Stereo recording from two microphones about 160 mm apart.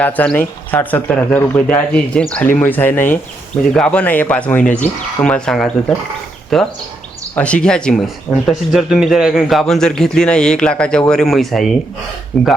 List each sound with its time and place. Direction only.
0.0 s speech: 10° left (ahead or behind)